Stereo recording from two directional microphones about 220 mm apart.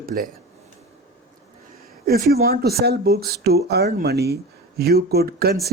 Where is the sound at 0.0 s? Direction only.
40° right (ahead or behind).